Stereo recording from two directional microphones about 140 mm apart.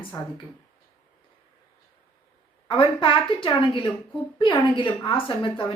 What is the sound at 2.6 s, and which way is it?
A woman's voice, 35° left (ahead or behind).